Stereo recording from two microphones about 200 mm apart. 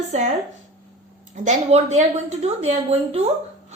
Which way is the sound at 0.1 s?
35° right (ahead or behind).